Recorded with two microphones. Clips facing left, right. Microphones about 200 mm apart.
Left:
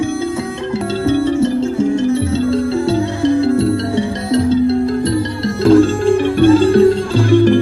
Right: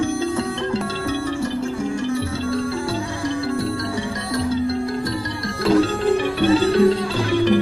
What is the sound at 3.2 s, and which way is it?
Music, 25° left (ahead or behind).